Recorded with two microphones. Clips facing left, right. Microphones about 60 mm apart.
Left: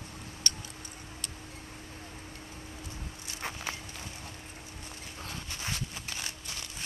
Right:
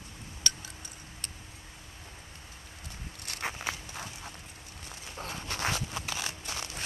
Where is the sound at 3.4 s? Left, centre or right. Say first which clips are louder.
Right 2 dB; centre.